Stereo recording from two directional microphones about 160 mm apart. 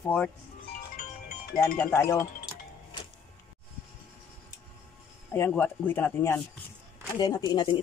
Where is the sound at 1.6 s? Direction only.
15° left (ahead or behind).